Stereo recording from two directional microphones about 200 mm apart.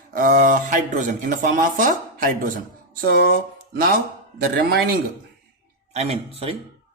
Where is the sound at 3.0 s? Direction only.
50° right (ahead or behind).